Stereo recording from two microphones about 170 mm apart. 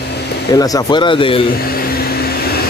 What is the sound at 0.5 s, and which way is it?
Speech, 20° left (ahead or behind).